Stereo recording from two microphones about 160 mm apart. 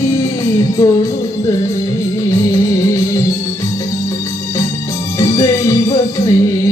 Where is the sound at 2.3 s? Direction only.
20° left (ahead or behind).